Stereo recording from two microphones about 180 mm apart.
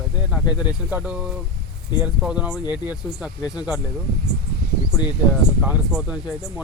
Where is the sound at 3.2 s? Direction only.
5° right (ahead or behind).